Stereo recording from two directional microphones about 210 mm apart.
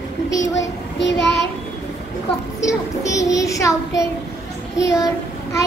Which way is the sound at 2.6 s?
15° left (ahead or behind).